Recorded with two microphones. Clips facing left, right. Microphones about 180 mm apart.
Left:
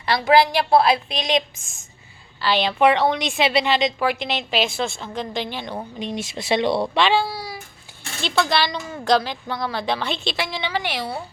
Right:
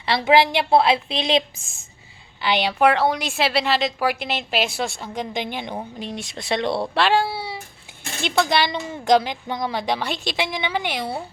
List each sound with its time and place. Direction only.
0.0 s a woman's voice: 25° right (ahead or behind)
2.4 s a woman's voice: 15° right (ahead or behind)
6.0 s speech: centre (ahead or behind)
7.3 s a sound: 25° right (ahead or behind)
8.2 s a woman's voice: 15° right (ahead or behind)